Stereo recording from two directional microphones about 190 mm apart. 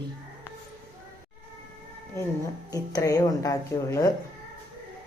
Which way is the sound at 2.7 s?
20° left (ahead or behind).